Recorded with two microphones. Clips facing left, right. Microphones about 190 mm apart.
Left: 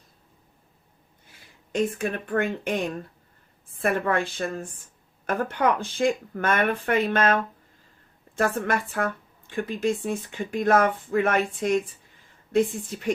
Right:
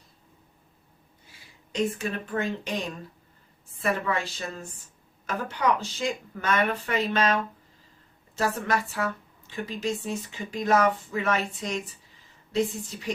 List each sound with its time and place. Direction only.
1.3 s a woman's voice: 55° left (ahead or behind)